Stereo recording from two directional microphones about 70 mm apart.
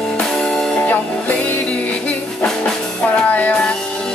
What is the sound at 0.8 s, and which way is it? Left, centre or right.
Music, left.